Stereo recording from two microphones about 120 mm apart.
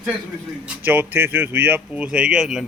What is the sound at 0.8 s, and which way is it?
Speech, 15° right (ahead or behind).